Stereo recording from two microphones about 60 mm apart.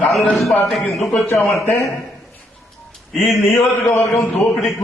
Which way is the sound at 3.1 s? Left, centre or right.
Centre.